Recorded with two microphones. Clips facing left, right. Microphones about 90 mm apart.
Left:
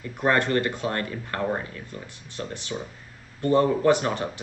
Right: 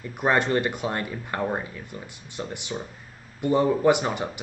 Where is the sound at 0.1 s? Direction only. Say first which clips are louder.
Even; 15° right (ahead or behind).